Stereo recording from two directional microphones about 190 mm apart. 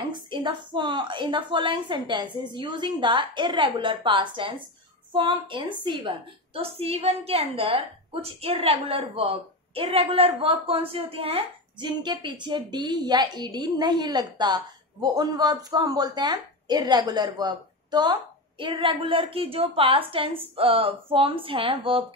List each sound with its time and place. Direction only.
0.3 s a woman's voice: 25° right (ahead or behind)